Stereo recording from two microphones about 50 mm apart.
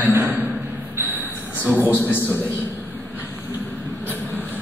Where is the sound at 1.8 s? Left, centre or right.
Left.